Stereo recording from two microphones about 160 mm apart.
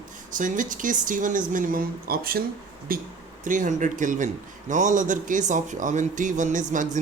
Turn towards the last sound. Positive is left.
turn(degrees=-55)  # may be behind; listen again after turning